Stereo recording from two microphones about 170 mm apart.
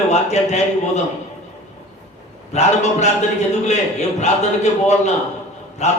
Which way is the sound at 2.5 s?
40° left (ahead or behind).